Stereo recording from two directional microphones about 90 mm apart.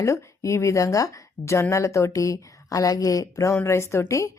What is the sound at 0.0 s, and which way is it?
A woman's voice, 35° left (ahead or behind).